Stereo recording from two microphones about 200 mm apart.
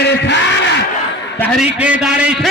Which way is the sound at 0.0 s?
55° left (ahead or behind).